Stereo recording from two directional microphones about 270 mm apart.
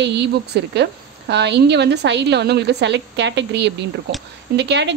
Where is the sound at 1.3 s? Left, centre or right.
Right.